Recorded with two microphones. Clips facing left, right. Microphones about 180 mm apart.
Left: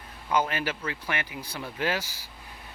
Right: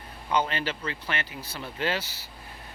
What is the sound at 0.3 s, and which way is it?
Speech, 10° left (ahead or behind).